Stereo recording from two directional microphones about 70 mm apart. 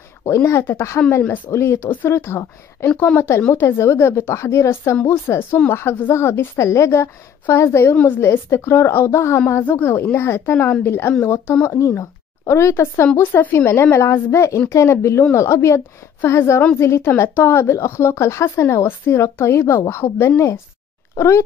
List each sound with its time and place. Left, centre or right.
0.2 s speech: left
9.6 s a woman's voice: left
11.2 s a woman's voice: left